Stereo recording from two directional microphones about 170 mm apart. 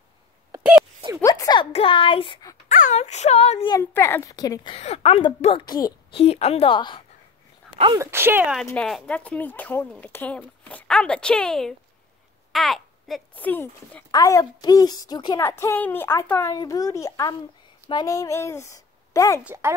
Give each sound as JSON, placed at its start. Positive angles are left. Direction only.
{"t": 1.2, "sound": "a sound", "side_deg": 20}
{"t": 1.7, "sound": "a child's voice", "side_deg": 35}
{"t": 2.7, "sound": "speech", "side_deg": 45}
{"t": 3.7, "sound": "a woman's voice", "side_deg": 15}
{"t": 4.7, "sound": "a child's voice", "side_deg": 35}
{"t": 6.2, "sound": "a child's voice", "side_deg": 35}
{"t": 7.7, "sound": "a sound", "side_deg": -30}
{"t": 8.0, "sound": "speech", "side_deg": -15}
{"t": 8.6, "sound": "speech", "side_deg": 5}
{"t": 14.1, "sound": "a woman's voice", "side_deg": 20}
{"t": 19.4, "sound": "speech", "side_deg": -15}